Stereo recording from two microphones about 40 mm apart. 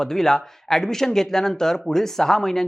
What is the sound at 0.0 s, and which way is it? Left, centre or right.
Speech, centre.